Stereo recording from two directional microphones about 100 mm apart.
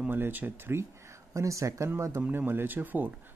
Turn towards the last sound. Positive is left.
turn(degrees=-20)  # may be behind; listen again after turning